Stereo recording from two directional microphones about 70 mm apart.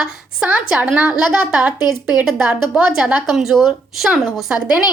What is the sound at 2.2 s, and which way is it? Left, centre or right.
A woman's voice, centre.